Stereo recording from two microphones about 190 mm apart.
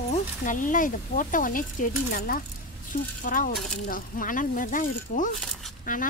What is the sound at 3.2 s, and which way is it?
Speech, 45° left (ahead or behind).